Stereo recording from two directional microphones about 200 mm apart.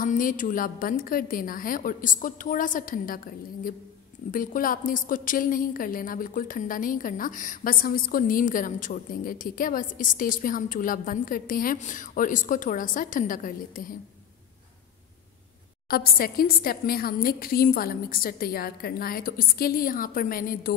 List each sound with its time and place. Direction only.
0.0 s a woman's voice: 40° left (ahead or behind)
15.9 s a woman's voice: 50° left (ahead or behind)